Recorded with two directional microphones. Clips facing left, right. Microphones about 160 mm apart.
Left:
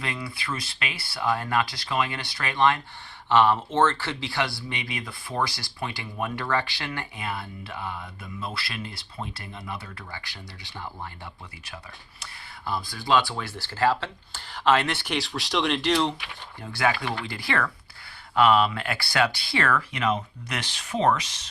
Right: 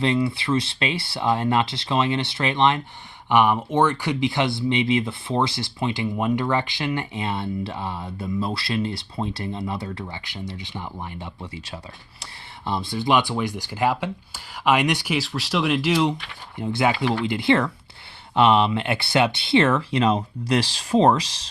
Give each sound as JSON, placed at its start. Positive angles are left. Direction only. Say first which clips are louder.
{"t": 0.0, "sound": "speech", "louder": "right 12 dB", "side_deg": -25}
{"t": 12.2, "sound": "speech", "louder": "right 4 dB", "side_deg": -25}
{"t": 16.6, "sound": "speech", "louder": "right 4 dB", "side_deg": -20}